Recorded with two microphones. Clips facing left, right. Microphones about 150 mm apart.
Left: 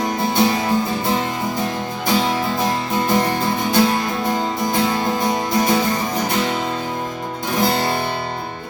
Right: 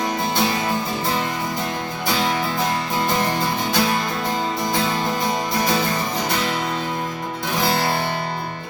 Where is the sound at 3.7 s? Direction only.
20° left (ahead or behind).